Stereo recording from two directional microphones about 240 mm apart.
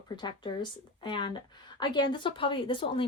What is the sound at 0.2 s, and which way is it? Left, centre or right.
A woman's voice, centre.